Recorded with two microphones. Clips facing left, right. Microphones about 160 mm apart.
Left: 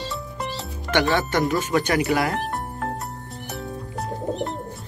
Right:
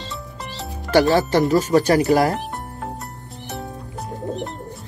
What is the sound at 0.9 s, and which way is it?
Speech, 35° right (ahead or behind).